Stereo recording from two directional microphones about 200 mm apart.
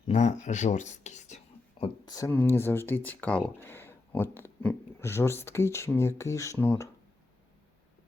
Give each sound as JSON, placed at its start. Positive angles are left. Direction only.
{"t": 0.1, "sound": "speech", "side_deg": 35}
{"t": 1.8, "sound": "speech", "side_deg": 20}